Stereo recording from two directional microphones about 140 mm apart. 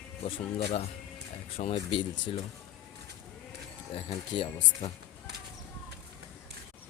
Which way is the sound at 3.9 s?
40° left (ahead or behind).